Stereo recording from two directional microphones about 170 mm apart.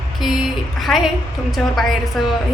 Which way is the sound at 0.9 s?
Centre (ahead or behind).